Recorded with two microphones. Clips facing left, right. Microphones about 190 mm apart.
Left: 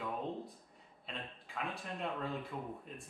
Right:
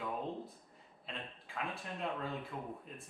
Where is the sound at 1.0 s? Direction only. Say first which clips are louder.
Even; centre (ahead or behind).